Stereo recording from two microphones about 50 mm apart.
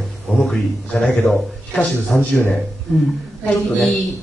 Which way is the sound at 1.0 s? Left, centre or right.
Centre.